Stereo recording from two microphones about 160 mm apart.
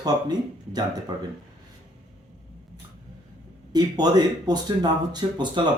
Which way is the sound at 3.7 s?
25° right (ahead or behind).